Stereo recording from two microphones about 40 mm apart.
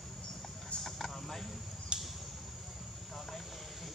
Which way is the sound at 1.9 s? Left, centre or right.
Right.